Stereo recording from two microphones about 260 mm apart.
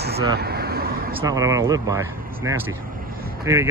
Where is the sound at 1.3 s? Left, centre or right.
Centre.